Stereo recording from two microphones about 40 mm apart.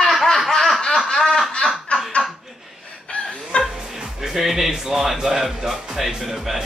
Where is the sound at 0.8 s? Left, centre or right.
Centre.